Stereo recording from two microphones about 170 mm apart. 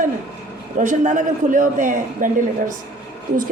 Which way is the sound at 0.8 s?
45° right (ahead or behind).